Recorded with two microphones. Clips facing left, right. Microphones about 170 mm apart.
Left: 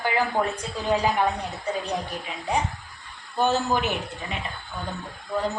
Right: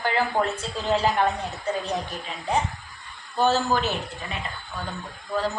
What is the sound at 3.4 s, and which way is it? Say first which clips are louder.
Speech: right 1 dB; 15° left (ahead or behind).